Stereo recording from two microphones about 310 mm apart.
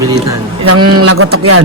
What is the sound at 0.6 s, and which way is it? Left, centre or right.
Speech, right.